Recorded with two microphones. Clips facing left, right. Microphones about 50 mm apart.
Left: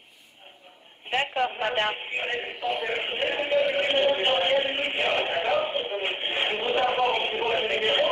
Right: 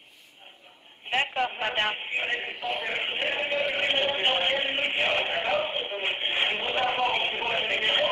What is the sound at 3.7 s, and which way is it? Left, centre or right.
Music, centre.